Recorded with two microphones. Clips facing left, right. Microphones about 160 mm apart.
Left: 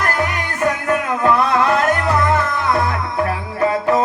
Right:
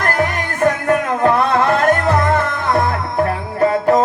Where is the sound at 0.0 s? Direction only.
45° right (ahead or behind).